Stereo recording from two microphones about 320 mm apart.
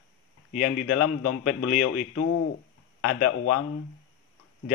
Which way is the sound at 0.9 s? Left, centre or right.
Left.